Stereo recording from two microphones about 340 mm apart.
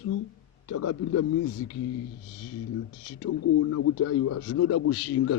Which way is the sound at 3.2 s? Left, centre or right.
Left.